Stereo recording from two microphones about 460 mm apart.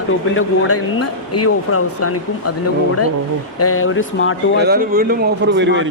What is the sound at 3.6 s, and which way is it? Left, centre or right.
Speech, left.